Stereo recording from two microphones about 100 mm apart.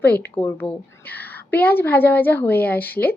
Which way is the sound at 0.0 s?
20° left (ahead or behind).